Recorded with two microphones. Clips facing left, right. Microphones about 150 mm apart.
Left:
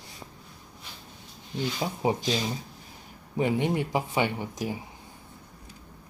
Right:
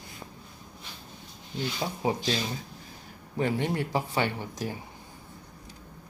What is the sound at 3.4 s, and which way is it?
Speech, 15° left (ahead or behind).